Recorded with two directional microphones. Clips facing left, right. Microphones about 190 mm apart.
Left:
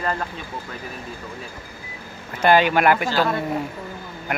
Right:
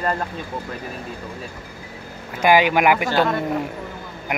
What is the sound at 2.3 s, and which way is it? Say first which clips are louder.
Speech: right 1 dB; 10° right (ahead or behind).